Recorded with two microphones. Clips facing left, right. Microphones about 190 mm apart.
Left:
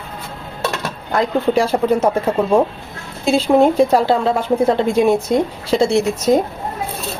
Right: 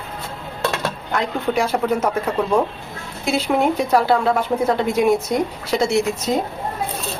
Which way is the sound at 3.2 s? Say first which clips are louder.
Left 6 dB; 30° left (ahead or behind).